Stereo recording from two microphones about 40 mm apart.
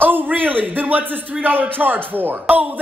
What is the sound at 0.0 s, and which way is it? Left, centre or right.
A woman's voice, right.